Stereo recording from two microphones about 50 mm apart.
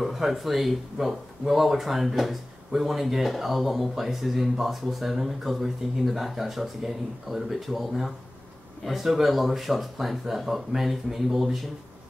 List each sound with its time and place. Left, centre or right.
0.0 s speech: centre